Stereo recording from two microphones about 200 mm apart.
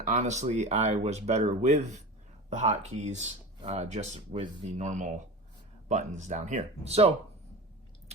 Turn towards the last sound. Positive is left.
turn(degrees=-30)  # may be behind; listen again after turning